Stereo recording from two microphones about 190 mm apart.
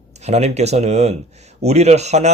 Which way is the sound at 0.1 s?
35° right (ahead or behind).